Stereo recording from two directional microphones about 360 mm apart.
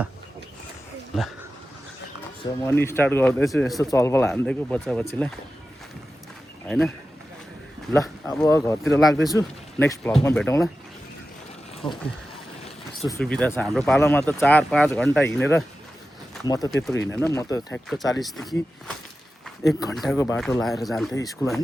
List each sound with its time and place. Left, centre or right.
1.1 s speech: centre
2.4 s speech: centre
6.7 s speech: centre
11.8 s speech: centre
13.2 s speech: centre
19.5 s speech: centre